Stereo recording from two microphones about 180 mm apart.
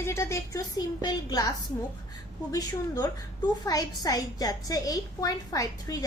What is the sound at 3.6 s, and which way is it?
A woman's voice, 20° left (ahead or behind).